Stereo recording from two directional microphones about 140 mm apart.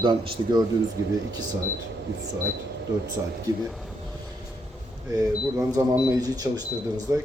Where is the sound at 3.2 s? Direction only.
20° right (ahead or behind).